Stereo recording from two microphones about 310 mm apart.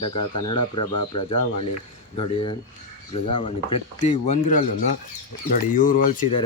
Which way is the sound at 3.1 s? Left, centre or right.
Centre.